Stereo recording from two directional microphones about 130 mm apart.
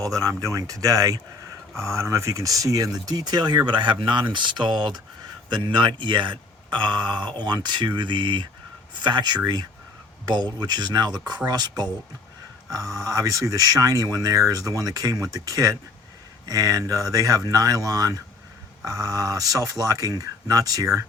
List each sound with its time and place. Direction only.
0.0 s speech: 25° right (ahead or behind)